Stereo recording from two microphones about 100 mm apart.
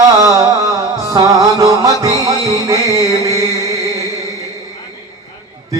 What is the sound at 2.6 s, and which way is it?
Mantra, 35° right (ahead or behind).